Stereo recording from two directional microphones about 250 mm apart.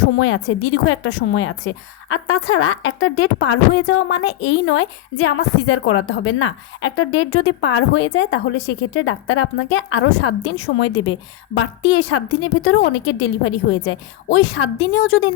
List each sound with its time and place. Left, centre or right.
0.2 s a woman's voice: left